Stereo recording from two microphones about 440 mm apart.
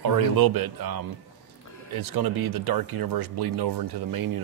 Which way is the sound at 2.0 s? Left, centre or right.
Right.